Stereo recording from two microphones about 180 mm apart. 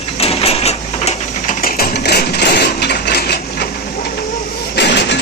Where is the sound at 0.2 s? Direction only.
35° left (ahead or behind).